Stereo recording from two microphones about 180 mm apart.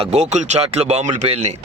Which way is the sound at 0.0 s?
40° right (ahead or behind).